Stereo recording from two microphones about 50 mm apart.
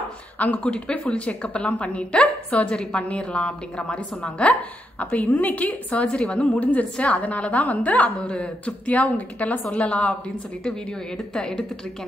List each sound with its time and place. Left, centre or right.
0.4 s a woman's voice: left